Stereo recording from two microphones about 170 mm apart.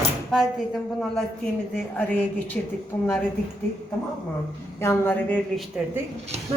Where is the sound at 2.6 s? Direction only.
10° left (ahead or behind).